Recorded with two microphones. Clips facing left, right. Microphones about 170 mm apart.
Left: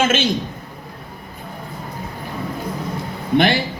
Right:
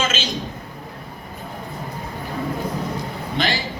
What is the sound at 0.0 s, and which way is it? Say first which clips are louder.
Speech: left 7 dB; 55° left (ahead or behind).